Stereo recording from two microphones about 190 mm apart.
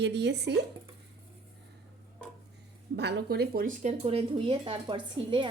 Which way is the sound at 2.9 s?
60° right (ahead or behind).